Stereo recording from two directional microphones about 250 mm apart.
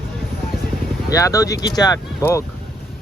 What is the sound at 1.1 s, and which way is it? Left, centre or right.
Speech, centre.